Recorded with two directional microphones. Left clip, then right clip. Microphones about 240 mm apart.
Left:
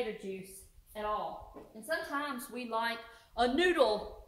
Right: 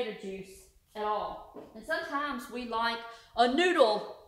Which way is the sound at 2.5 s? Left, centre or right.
Centre.